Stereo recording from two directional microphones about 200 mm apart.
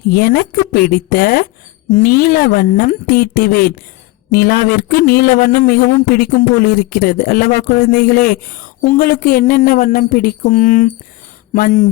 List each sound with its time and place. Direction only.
0.1 s speech: 45° left (ahead or behind)